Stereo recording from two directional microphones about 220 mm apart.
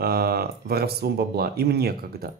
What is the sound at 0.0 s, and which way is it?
Speech, 45° right (ahead or behind).